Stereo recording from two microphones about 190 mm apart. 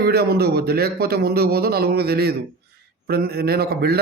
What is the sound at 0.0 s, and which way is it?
A man's voice, 55° right (ahead or behind).